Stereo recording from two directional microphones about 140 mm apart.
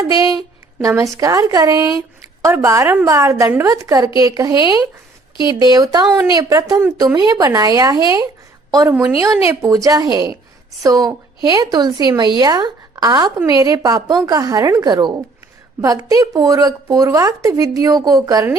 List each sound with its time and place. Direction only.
0.0 s speech: 25° right (ahead or behind)
9.5 s speech: 20° right (ahead or behind)